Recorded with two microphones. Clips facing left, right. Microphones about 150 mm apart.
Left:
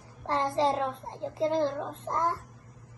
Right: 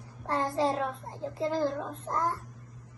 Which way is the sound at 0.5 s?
25° left (ahead or behind).